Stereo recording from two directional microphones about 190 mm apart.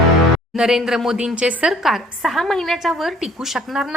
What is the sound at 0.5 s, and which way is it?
A woman's voice, 5° right (ahead or behind).